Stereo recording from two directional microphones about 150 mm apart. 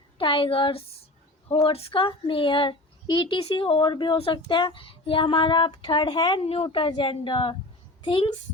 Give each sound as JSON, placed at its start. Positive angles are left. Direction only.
{"t": 0.2, "sound": "speech", "side_deg": 35}